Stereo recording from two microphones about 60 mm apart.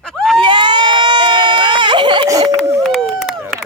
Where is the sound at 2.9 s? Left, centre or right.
Centre.